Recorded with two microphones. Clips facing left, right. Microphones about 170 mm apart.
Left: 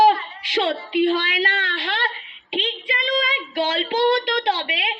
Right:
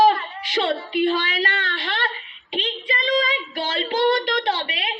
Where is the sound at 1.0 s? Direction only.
25° left (ahead or behind).